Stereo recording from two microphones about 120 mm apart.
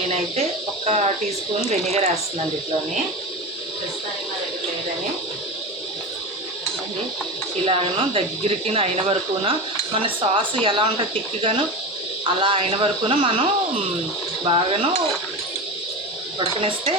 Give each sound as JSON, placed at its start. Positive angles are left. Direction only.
{"t": 0.9, "sound": "speech", "side_deg": -65}
{"t": 7.6, "sound": "speech", "side_deg": -55}
{"t": 12.2, "sound": "speech", "side_deg": -45}
{"t": 16.6, "sound": "speech", "side_deg": -50}